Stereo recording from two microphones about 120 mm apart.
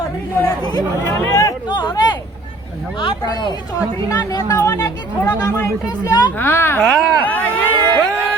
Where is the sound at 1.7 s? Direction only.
40° left (ahead or behind).